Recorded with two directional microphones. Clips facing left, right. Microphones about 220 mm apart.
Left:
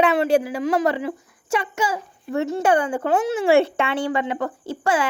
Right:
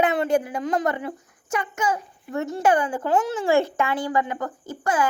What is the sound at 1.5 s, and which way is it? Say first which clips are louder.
Speech: left 2 dB; 30° left (ahead or behind).